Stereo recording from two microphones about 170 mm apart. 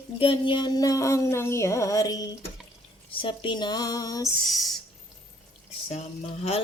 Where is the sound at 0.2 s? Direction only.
30° left (ahead or behind).